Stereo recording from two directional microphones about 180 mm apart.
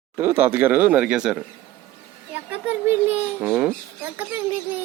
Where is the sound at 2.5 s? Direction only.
10° right (ahead or behind).